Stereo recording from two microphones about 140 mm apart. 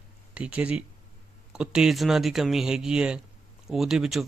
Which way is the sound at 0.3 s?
10° right (ahead or behind).